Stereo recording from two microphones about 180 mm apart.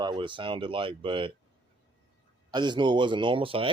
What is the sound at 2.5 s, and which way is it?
Speech, 25° right (ahead or behind).